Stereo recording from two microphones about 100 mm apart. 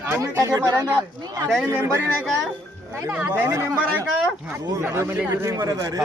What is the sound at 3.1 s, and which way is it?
Speech, 15° right (ahead or behind).